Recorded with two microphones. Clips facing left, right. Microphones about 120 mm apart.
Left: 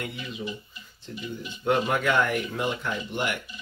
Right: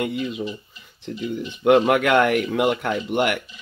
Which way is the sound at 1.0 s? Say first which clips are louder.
Right 8 dB; 75° right (ahead or behind).